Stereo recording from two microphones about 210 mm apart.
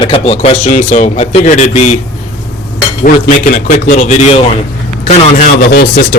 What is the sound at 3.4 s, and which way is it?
A man's voice, 40° left (ahead or behind).